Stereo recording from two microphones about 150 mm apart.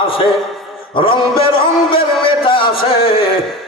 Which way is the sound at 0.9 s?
35° left (ahead or behind).